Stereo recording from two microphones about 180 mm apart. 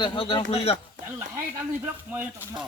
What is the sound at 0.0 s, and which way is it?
Speech, 30° left (ahead or behind).